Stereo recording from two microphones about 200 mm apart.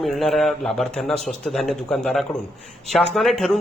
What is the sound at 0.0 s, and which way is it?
Speech, centre (ahead or behind).